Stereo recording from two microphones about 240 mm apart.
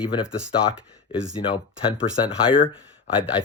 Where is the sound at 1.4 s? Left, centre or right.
Left.